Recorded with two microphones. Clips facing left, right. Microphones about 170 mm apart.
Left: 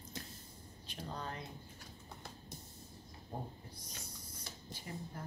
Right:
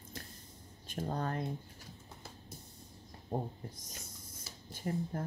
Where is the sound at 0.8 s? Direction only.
50° right (ahead or behind).